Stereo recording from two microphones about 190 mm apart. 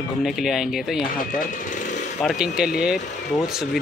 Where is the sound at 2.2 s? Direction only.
Centre (ahead or behind).